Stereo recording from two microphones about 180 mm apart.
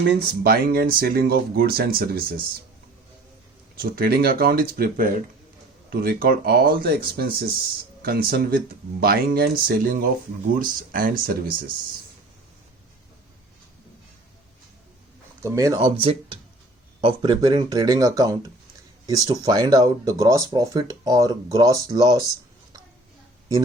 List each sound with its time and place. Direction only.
0.0 s speech: 60° right (ahead or behind)
3.8 s speech: 55° right (ahead or behind)
15.4 s speech: 15° right (ahead or behind)
15.8 s speech: 30° right (ahead or behind)